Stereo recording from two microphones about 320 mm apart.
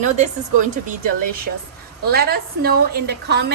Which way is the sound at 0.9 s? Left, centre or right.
Right.